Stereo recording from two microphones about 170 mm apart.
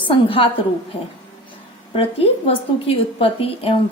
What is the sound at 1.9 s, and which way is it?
A woman's voice, 35° left (ahead or behind).